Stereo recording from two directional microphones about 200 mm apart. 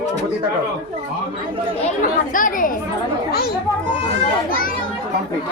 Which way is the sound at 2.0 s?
45° left (ahead or behind).